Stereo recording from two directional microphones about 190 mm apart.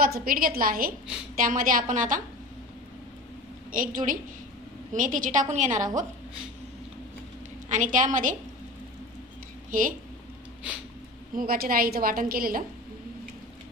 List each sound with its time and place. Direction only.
0.0 s a woman's voice: 50° right (ahead or behind)
3.7 s a woman's voice: 45° right (ahead or behind)
7.7 s a woman's voice: 45° right (ahead or behind)
9.7 s speech: 45° right (ahead or behind)
11.3 s a woman's voice: 50° right (ahead or behind)